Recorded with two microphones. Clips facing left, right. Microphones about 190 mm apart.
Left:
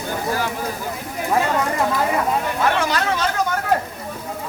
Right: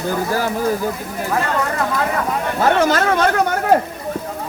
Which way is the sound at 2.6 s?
45° right (ahead or behind).